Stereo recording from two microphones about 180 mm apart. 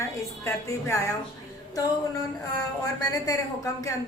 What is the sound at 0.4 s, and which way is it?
Speech, 15° left (ahead or behind).